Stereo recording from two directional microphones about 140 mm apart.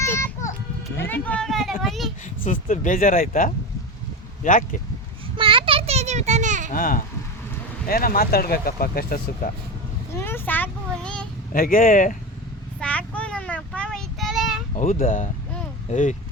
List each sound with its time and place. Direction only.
0.1 s a sound: 20° left (ahead or behind); by 2.0 s centre (ahead or behind)
2.4 s speech: 65° left (ahead or behind)
5.4 s children playing: 35° right (ahead or behind); by 6.7 s 60° right (ahead or behind)
6.7 s speech: 90° left
10.2 s a sound: 15° left (ahead or behind)
11.5 s speech: 90° left
12.8 s child singing: 10° left (ahead or behind)
15.0 s speech: 65° left (ahead or behind)